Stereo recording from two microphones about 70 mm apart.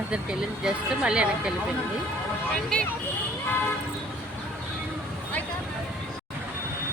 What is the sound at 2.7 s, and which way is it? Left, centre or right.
Speech, centre.